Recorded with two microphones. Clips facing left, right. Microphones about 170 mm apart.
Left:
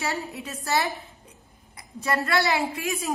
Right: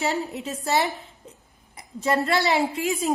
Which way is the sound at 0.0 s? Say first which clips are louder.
Right 4 dB; 20° right (ahead or behind).